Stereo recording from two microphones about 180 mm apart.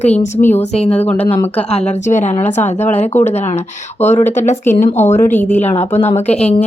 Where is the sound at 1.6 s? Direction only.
40° left (ahead or behind).